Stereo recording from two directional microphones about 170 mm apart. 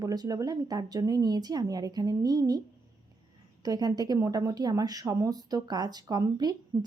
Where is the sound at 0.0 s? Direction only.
20° right (ahead or behind).